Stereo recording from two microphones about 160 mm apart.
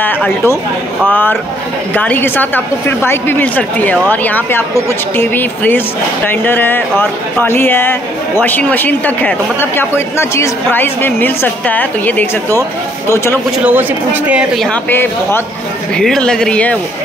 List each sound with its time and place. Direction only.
0.0 s a woman's voice: 10° left (ahead or behind)
2.0 s a woman's voice: 10° left (ahead or behind)
13.7 s speech: 10° right (ahead or behind)
14.9 s a woman's voice: 15° left (ahead or behind)